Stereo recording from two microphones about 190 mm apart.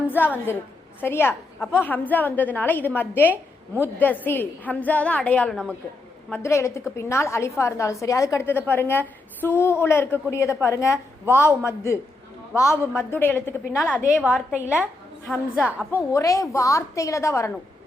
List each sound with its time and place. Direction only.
0.2 s a woman's voice: 10° left (ahead or behind)
14.1 s a woman's voice: 5° right (ahead or behind)
16.1 s a woman's voice: 15° left (ahead or behind)